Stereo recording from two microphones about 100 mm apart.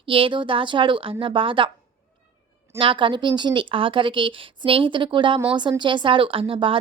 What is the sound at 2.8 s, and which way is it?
Speech, 60° right (ahead or behind).